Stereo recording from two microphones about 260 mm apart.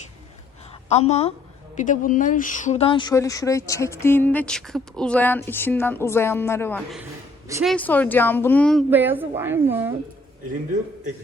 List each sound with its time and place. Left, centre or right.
0.9 s a woman's voice: left; by 8.8 s centre
8.9 s a woman's voice: centre